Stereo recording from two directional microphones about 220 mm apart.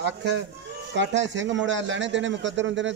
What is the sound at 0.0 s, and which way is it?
A man's voice, 50° right (ahead or behind).